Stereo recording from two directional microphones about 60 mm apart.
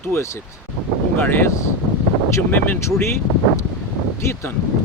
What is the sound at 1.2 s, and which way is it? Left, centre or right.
Speech, left.